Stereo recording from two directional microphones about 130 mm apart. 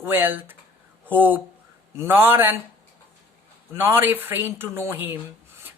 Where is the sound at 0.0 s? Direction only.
15° right (ahead or behind).